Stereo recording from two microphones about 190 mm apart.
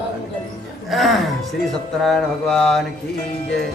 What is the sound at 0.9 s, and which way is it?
Speech, centre (ahead or behind).